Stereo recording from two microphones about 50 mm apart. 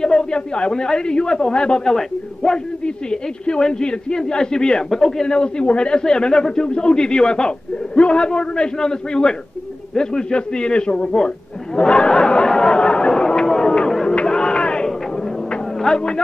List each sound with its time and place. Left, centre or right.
0.0 s a man's voice: centre
11.1 s chatter: centre
14.0 s crowd: centre
15.8 s speech: centre